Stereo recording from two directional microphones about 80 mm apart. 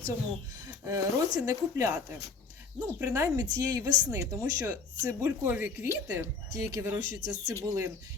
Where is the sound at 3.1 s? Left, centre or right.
Right.